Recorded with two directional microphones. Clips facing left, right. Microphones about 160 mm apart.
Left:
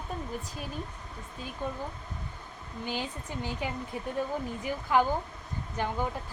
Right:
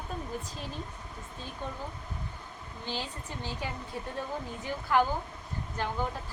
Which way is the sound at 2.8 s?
15° left (ahead or behind).